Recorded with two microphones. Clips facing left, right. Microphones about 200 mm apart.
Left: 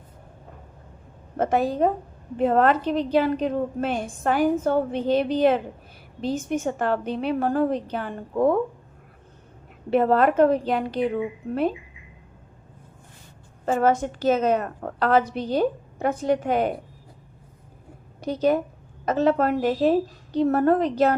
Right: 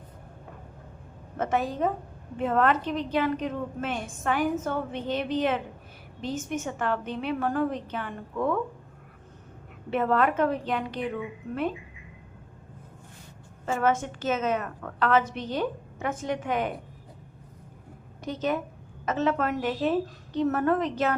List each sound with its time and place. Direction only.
1.4 s a woman's voice: 35° left (ahead or behind)
9.9 s a woman's voice: 35° left (ahead or behind)
13.7 s a woman's voice: 35° left (ahead or behind)
18.2 s a woman's voice: 35° left (ahead or behind)